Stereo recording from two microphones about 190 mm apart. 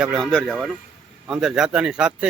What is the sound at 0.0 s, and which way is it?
Speech, centre (ahead or behind).